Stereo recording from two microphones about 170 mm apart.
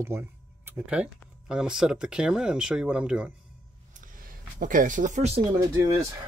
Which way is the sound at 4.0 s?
55° right (ahead or behind).